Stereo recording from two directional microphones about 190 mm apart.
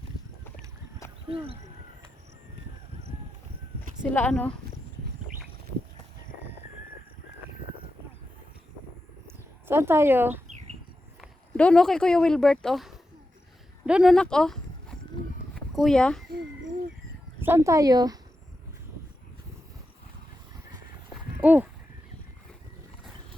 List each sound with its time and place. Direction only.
0.4 s boat: 15° left (ahead or behind)
1.3 s speech: 30° right (ahead or behind)
4.0 s speech: 10° left (ahead or behind)
9.2 s a sound: 10° right (ahead or behind)
11.2 s speech: 5° left (ahead or behind)
17.4 s speech: 15° right (ahead or behind)
21.4 s a sound: 10° right (ahead or behind)